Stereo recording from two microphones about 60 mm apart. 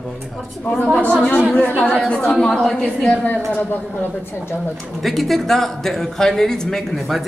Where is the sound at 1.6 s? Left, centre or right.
Left.